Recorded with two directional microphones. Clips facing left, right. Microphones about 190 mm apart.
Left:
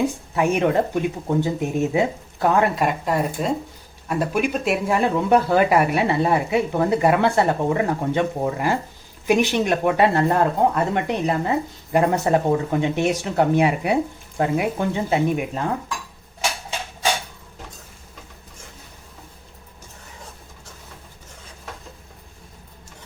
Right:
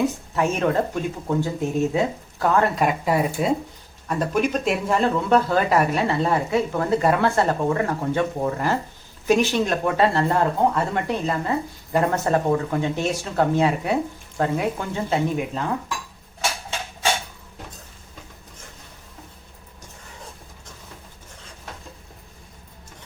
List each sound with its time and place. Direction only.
0.0 s speech: 15° left (ahead or behind)
2.7 s speech: centre (ahead or behind)
4.1 s speech: 5° left (ahead or behind)